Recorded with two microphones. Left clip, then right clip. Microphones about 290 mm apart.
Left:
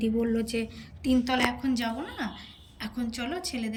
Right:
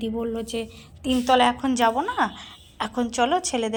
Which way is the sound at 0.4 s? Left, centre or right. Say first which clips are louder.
Right 2 dB; centre.